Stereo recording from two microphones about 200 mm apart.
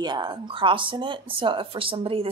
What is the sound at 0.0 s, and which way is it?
Speech, 20° right (ahead or behind).